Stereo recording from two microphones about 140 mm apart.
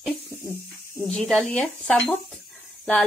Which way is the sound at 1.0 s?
5° left (ahead or behind).